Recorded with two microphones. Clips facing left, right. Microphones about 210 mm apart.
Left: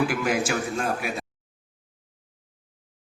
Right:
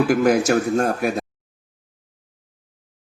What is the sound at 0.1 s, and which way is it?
A man's voice, 40° right (ahead or behind).